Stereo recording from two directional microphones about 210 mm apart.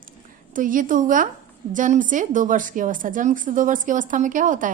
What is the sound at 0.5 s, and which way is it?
A woman's voice, 40° right (ahead or behind).